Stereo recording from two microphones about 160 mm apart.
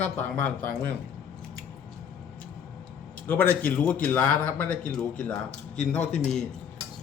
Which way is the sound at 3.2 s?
10° left (ahead or behind).